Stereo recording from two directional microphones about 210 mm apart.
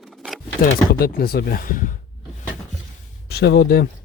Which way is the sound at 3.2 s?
50° left (ahead or behind).